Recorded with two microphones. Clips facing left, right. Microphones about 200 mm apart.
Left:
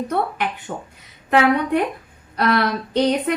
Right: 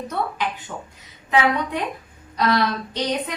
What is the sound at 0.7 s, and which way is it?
Speech, 45° left (ahead or behind).